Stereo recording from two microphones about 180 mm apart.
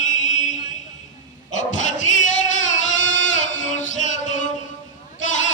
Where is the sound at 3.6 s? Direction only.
45° left (ahead or behind).